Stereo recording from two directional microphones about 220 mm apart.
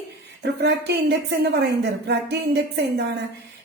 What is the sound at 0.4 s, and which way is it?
A woman's voice, 50° right (ahead or behind).